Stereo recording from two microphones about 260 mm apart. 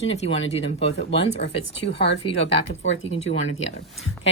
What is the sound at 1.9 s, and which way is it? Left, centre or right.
A woman's voice, left.